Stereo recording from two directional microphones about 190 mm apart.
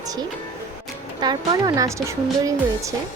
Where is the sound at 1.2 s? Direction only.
20° right (ahead or behind).